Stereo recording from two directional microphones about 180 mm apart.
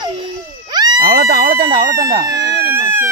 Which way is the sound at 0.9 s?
55° right (ahead or behind).